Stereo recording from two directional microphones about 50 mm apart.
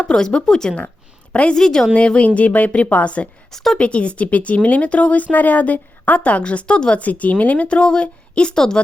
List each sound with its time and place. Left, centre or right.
0.0 s a woman's voice: centre
1.3 s a woman's voice: left
1.5 s a woman's voice: centre
1.9 s speech: left
3.5 s a woman's voice: centre
3.8 s speech: left
7.0 s speech: left; by 8.8 s centre